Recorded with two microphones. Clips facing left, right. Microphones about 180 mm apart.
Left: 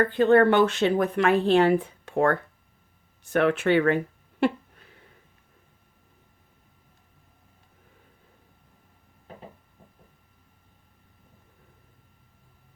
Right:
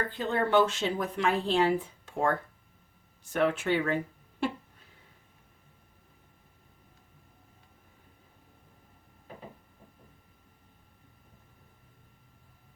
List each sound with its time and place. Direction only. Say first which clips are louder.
0.0 s speech: left 12 dB; 65° left (ahead or behind)